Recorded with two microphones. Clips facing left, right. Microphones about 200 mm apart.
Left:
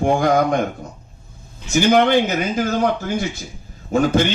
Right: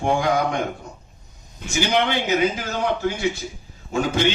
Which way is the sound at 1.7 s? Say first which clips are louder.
Left 7 dB; 50° left (ahead or behind).